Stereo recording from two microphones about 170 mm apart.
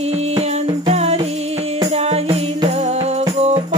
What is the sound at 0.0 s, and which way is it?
Music, 40° right (ahead or behind).